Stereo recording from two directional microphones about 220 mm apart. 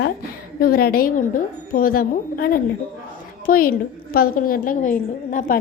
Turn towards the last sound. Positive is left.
turn(degrees=35)  # may be behind; listen again after turning